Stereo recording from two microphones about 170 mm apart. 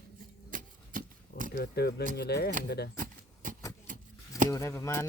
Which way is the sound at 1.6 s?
70° left (ahead or behind).